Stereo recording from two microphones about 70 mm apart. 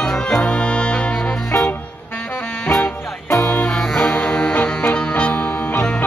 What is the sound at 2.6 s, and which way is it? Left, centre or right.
Music, left.